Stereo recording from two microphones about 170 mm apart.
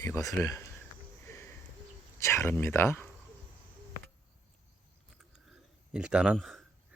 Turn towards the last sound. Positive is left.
turn(degrees=0)  # may be behind; listen again after turning